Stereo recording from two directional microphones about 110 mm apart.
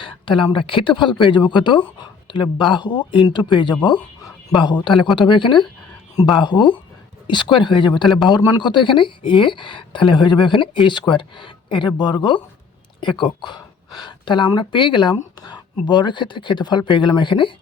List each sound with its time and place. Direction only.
0.0 s speech: 50° left (ahead or behind)